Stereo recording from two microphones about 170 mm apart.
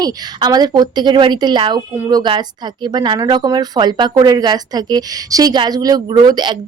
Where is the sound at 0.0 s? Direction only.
25° right (ahead or behind).